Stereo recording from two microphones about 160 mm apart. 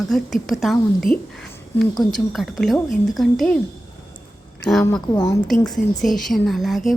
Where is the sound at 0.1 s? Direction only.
Centre (ahead or behind).